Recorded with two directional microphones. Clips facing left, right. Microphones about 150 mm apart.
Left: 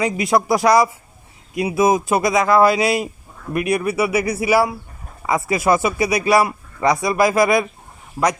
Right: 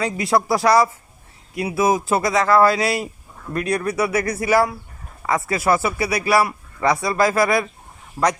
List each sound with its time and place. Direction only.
0.0 s a man's voice: 15° left (ahead or behind)